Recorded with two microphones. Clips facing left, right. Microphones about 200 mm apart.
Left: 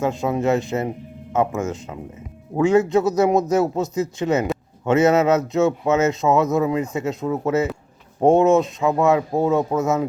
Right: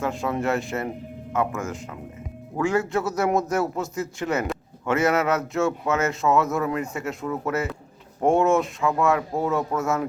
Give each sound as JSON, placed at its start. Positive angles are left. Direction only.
{"t": 0.0, "sound": "speech", "side_deg": 20}